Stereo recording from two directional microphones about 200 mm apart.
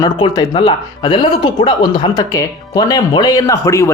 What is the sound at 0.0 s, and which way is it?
Speech, 20° left (ahead or behind).